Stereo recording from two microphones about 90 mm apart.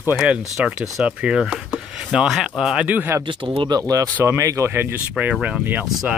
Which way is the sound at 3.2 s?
70° right (ahead or behind).